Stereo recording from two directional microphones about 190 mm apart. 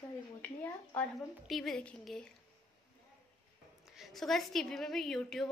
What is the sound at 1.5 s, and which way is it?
Speech, centre (ahead or behind).